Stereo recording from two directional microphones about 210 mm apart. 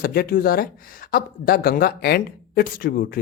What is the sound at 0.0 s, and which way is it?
Speech, 45° left (ahead or behind).